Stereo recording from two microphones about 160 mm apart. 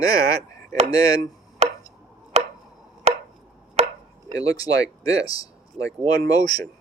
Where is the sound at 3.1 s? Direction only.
45° right (ahead or behind).